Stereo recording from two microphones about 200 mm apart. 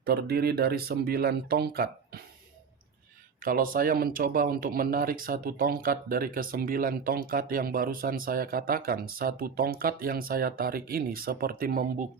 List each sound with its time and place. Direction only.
0.0 s speech: 55° right (ahead or behind)
3.4 s speech: 45° right (ahead or behind)